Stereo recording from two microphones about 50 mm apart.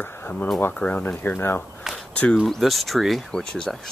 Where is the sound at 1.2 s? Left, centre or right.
Left.